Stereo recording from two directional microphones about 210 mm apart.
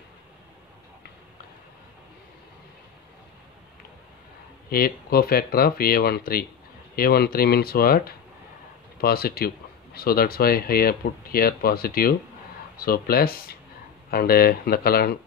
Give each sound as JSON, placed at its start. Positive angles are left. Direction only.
{"t": 4.6, "sound": "speech", "side_deg": 45}
{"t": 9.0, "sound": "speech", "side_deg": 45}